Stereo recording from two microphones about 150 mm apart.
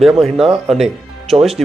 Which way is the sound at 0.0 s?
Centre (ahead or behind).